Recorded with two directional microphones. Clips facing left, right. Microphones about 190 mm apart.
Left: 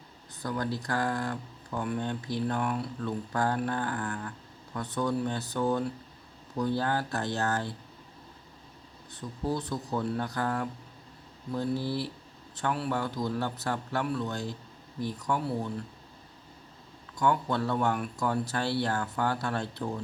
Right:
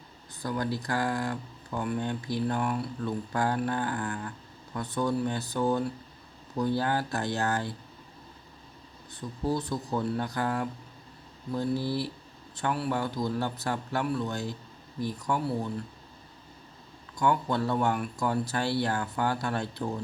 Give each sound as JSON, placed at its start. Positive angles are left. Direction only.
{"t": 0.4, "sound": "speech", "side_deg": -10}
{"t": 9.5, "sound": "speech", "side_deg": -10}
{"t": 17.2, "sound": "speech", "side_deg": -15}